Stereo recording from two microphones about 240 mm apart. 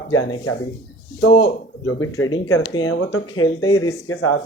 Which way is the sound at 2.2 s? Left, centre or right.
Left.